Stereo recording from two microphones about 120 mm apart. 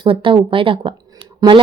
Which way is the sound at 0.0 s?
45° right (ahead or behind).